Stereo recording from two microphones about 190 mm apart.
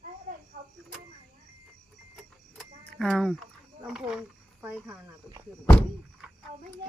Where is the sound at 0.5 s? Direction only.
50° right (ahead or behind).